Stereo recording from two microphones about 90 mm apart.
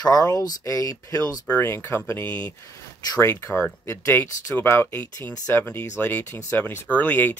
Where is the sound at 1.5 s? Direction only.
30° left (ahead or behind).